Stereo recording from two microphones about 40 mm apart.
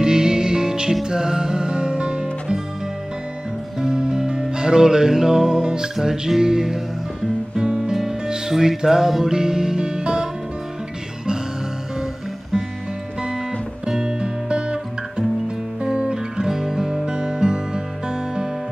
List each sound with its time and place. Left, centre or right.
0.0 s music: centre
3.8 s music: centre
13.8 s music: centre